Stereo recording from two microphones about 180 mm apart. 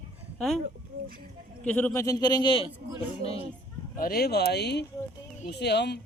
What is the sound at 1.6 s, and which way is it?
Speech, 10° left (ahead or behind).